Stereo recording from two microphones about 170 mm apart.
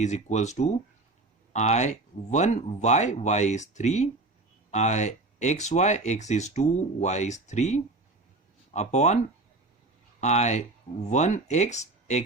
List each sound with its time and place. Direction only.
0.0 s speech: 45° left (ahead or behind)
10.2 s speech: 40° left (ahead or behind)